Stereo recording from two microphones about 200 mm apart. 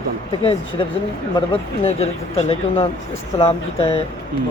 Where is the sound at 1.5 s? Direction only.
30° left (ahead or behind).